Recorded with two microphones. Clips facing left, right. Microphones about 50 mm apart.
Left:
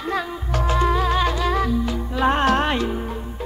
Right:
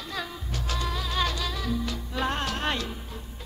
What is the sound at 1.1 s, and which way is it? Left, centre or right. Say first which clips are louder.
Music: left 9 dB; left.